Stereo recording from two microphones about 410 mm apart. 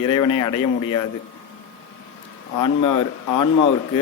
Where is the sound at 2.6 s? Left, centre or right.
Left.